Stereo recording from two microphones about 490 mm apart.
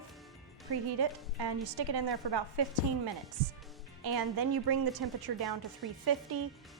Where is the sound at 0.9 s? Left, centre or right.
Right.